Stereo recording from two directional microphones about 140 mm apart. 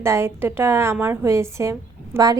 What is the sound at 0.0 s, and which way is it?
A woman's voice, 20° right (ahead or behind).